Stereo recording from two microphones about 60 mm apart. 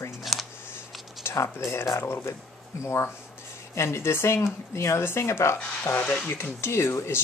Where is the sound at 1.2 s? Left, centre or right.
Left.